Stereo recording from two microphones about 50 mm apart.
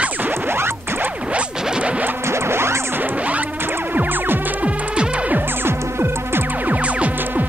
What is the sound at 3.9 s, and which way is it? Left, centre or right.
Music, right.